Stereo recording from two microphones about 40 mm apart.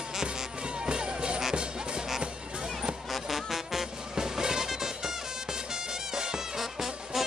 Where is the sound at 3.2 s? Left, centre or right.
Centre.